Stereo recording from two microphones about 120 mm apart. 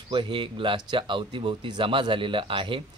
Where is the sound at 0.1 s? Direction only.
45° right (ahead or behind).